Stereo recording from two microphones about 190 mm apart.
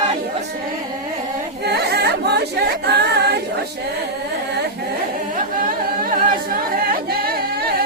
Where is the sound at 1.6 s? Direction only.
60° right (ahead or behind).